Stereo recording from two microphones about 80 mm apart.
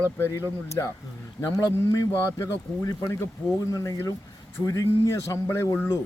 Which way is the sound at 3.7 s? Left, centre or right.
Left.